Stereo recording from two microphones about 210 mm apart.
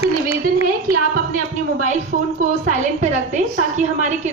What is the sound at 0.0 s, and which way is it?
Speech, 30° left (ahead or behind).